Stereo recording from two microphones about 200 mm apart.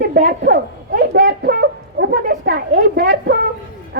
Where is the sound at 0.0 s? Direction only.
50° right (ahead or behind).